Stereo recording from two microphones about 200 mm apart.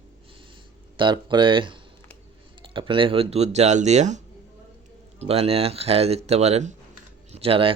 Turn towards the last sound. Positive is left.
turn(degrees=-30)  # may be behind; listen again after turning